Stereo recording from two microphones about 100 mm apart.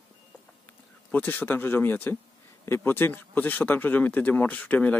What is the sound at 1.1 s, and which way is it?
Speech, 15° left (ahead or behind).